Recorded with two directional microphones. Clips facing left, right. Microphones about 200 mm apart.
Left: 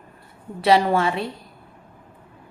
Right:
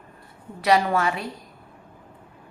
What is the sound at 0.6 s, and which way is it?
Speech, 30° left (ahead or behind).